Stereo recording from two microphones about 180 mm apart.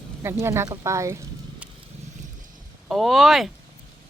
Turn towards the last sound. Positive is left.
turn(degrees=0)  # may be behind; listen again after turning